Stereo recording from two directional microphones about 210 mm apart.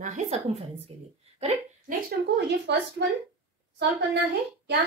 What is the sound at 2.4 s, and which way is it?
Speech, 50° right (ahead or behind).